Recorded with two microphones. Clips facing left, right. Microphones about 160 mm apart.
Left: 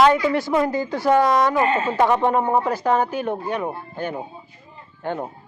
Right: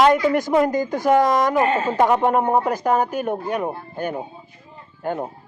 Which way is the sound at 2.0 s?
15° right (ahead or behind).